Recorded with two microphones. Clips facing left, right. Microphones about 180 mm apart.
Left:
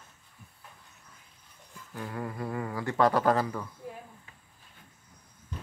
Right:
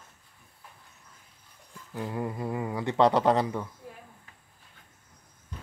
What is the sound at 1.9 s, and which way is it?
Speech, 15° right (ahead or behind).